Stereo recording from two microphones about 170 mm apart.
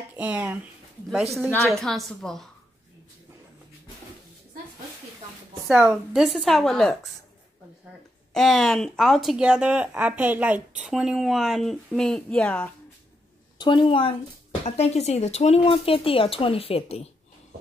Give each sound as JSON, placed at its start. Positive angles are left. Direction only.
{"t": 0.2, "sound": "speech", "side_deg": -10}
{"t": 1.5, "sound": "speech", "side_deg": 5}
{"t": 5.7, "sound": "speech", "side_deg": -5}
{"t": 8.3, "sound": "speech", "side_deg": 0}
{"t": 13.6, "sound": "speech", "side_deg": 30}